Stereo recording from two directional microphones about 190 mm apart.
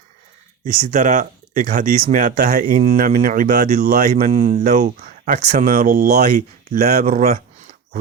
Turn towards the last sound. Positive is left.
turn(degrees=-45)  # may be behind; listen again after turning